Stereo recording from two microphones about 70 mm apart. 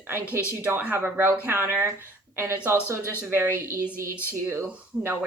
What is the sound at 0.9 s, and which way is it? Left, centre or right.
Speech, right.